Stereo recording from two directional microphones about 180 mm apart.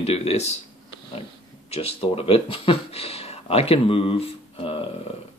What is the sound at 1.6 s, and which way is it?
Speech, 35° left (ahead or behind).